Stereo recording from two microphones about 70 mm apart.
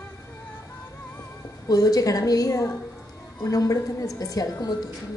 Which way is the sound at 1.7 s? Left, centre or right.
Left.